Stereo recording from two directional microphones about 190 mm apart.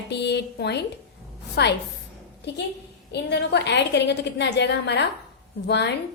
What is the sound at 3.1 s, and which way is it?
A woman's voice, 65° left (ahead or behind).